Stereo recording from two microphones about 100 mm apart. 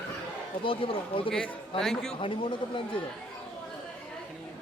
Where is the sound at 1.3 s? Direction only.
10° left (ahead or behind).